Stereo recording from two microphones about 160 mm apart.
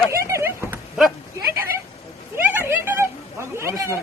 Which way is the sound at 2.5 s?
15° right (ahead or behind).